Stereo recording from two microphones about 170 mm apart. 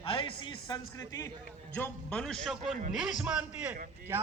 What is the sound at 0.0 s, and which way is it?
A man's voice, 30° left (ahead or behind).